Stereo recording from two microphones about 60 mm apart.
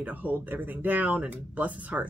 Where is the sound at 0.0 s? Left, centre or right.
Right.